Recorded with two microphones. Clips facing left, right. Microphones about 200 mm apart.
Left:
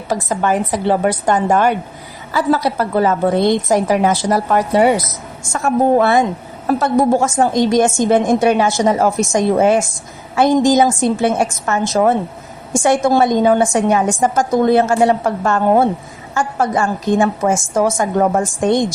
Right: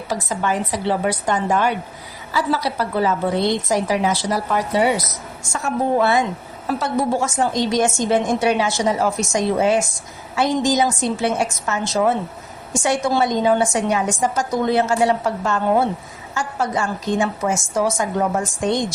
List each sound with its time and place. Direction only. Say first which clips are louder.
0.1 s a woman's voice: left 5 dB; 50° left (ahead or behind)